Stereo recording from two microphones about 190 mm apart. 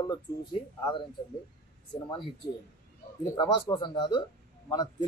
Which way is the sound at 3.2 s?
20° left (ahead or behind).